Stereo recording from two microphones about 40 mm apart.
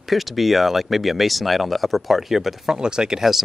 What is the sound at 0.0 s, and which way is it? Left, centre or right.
Speech, centre.